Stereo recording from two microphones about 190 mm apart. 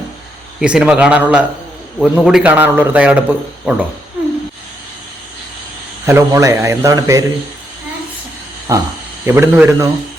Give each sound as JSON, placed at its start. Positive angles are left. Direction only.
{"t": 0.6, "sound": "a man's voice", "side_deg": -5}
{"t": 6.1, "sound": "a man's voice", "side_deg": -15}
{"t": 8.7, "sound": "a man's voice", "side_deg": -15}